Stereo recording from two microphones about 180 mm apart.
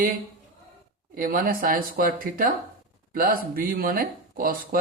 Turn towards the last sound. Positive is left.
turn(degrees=-50)  # may be behind; listen again after turning